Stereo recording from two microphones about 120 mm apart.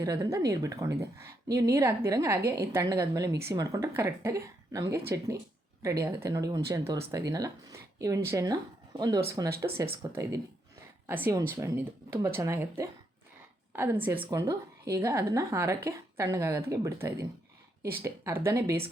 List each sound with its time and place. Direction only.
0.0 s a woman's voice: 30° right (ahead or behind)
14.3 s a woman's voice: 30° right (ahead or behind)